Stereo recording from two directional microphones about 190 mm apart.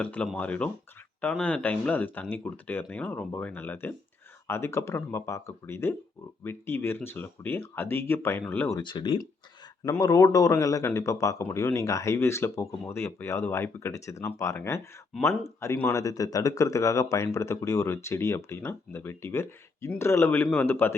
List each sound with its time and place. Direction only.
0.0 s speech: 5° left (ahead or behind)
8.8 s speech: 25° left (ahead or behind)